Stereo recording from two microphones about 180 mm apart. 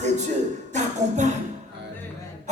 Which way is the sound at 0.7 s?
40° right (ahead or behind).